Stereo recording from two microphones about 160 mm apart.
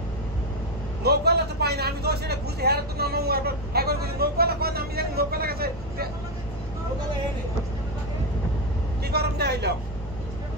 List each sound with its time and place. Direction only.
1.0 s speech: 90° right; by 6.0 s 70° right (ahead or behind)
9.0 s speech: 90° right